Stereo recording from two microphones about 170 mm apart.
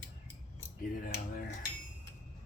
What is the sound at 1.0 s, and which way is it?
Cutlery, 55° left (ahead or behind).